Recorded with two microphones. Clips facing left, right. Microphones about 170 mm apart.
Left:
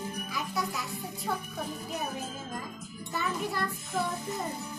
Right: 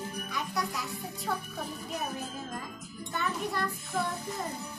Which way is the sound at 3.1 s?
Centre (ahead or behind).